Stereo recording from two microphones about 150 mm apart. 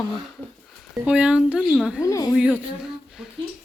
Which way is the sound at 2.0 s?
20° left (ahead or behind).